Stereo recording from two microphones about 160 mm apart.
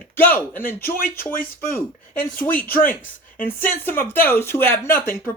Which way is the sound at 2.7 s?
60° left (ahead or behind).